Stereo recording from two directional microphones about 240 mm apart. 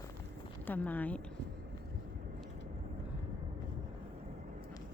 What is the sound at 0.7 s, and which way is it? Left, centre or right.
Speech, centre.